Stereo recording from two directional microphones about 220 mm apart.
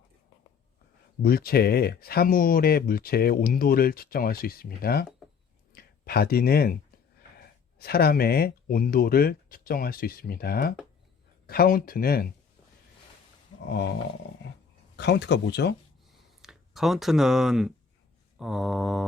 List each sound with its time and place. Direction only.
1.2 s speech: 45° left (ahead or behind)
14.9 s speech: 50° left (ahead or behind)
16.4 s speech: centre (ahead or behind)
18.3 s mantra: centre (ahead or behind)